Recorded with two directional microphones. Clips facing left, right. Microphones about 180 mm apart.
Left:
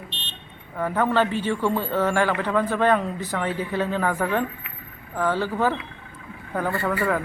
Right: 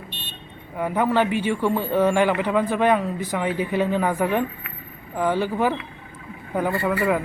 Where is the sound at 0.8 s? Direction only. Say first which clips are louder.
Right 1 dB; 15° right (ahead or behind).